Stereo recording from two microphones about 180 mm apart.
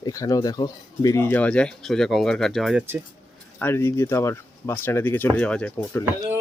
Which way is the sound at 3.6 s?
15° left (ahead or behind).